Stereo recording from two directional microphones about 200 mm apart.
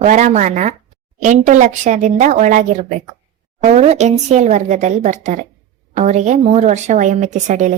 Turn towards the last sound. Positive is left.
turn(degrees=-35)  # may be behind; listen again after turning